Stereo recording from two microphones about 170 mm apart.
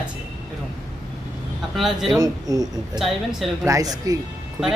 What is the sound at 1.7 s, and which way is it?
Speech, centre (ahead or behind).